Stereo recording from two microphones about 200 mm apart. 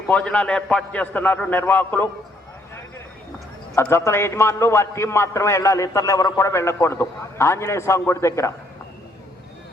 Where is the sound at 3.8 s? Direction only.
15° left (ahead or behind).